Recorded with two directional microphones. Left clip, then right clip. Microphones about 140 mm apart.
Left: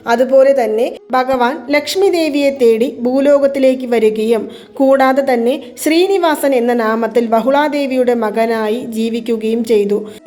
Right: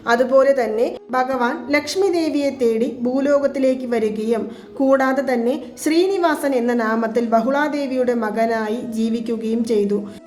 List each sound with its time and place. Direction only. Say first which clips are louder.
0.1 s a woman's voice: left 5 dB; 15° left (ahead or behind)
1.1 s a woman's voice: left 8 dB; 35° left (ahead or behind)